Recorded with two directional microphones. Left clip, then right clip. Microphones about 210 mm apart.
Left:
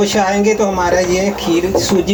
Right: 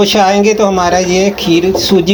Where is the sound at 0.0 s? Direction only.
40° right (ahead or behind).